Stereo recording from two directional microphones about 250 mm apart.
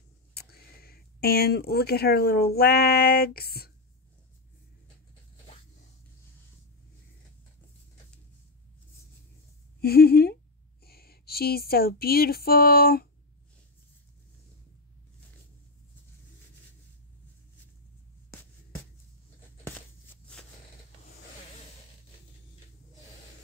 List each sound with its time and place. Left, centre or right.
0.3 s speech: left
9.8 s speech: left
10.8 s a sound: left